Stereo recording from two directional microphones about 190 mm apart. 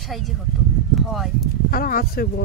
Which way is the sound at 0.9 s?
Centre (ahead or behind).